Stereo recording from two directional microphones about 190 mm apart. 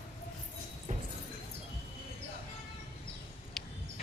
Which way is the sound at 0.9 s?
35° right (ahead or behind).